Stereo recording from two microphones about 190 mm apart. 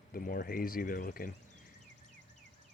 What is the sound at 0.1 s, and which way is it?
Speech, 45° left (ahead or behind).